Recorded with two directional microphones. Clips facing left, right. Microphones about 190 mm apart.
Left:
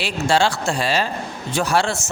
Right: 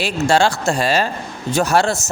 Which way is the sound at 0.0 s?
45° right (ahead or behind).